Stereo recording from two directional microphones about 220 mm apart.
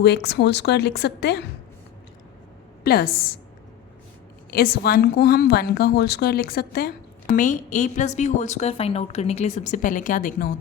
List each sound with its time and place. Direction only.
0.0 s a woman's voice: 50° left (ahead or behind)
2.8 s a woman's voice: 45° left (ahead or behind)
4.5 s a woman's voice: 45° left (ahead or behind)